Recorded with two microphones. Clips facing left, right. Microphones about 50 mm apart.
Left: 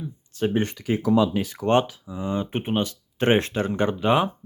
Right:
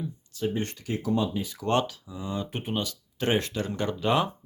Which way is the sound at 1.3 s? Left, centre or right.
Left.